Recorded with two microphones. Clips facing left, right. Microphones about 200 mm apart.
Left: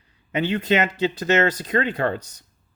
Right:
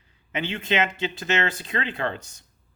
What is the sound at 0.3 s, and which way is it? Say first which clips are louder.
Speech: left 6 dB; 40° left (ahead or behind).